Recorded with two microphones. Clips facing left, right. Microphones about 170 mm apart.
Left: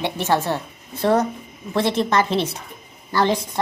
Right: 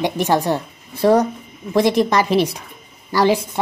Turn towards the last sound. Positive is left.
turn(degrees=-10)  # may be behind; listen again after turning